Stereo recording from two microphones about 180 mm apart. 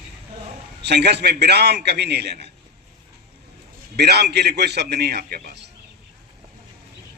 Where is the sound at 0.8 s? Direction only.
65° right (ahead or behind).